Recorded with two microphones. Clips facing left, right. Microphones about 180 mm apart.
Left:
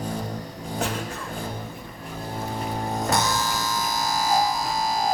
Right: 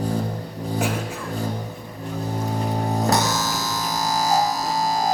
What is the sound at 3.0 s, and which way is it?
Music, 40° right (ahead or behind).